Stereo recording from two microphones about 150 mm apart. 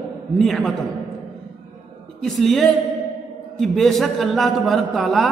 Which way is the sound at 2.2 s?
Centre (ahead or behind).